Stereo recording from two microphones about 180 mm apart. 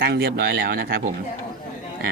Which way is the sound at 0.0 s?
65° right (ahead or behind).